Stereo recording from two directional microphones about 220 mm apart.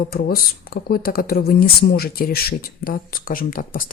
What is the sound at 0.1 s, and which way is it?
Speech, 45° left (ahead or behind).